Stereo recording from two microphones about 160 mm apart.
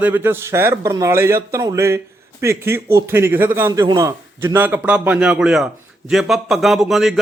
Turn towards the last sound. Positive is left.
turn(degrees=0)  # may be behind; listen again after turning